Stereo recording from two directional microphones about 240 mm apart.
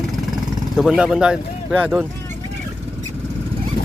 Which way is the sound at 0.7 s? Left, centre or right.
Centre.